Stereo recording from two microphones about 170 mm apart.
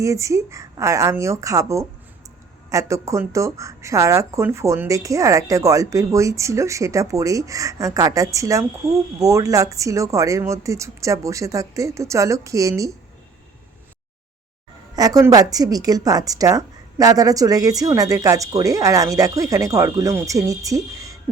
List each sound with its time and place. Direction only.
0.0 s speech: 20° right (ahead or behind)
14.9 s speech: 20° right (ahead or behind)